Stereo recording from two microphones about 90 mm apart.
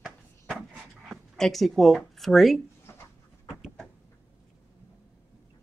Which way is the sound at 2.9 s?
30° left (ahead or behind).